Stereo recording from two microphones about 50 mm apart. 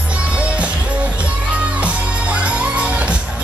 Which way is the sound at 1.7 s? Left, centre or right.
Right.